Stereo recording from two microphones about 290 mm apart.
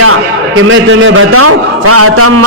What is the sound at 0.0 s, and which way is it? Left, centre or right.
A man's voice, right.